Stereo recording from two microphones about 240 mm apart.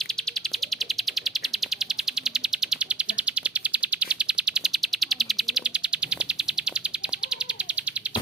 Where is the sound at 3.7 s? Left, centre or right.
Centre.